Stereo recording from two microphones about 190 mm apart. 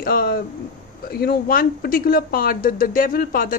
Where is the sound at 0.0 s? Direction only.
50° left (ahead or behind).